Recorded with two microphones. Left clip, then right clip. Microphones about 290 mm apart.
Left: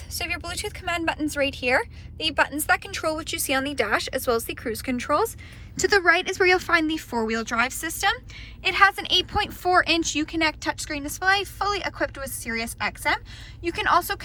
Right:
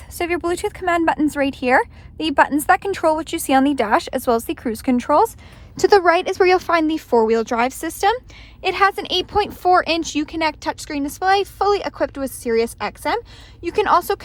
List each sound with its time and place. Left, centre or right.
0.2 s speech: right